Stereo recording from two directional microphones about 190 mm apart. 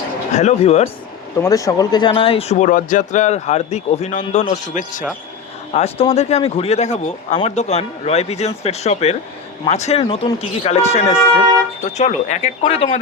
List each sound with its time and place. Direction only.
0.3 s speech: 35° left (ahead or behind)
1.4 s speech: 15° left (ahead or behind); by 13.0 s 35° left (ahead or behind)